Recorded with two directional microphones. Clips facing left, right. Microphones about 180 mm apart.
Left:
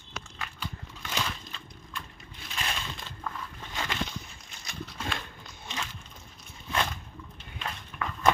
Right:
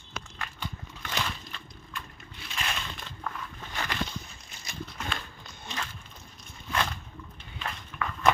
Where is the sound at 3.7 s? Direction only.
25° left (ahead or behind).